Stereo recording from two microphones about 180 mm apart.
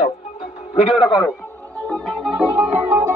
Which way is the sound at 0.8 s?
30° left (ahead or behind).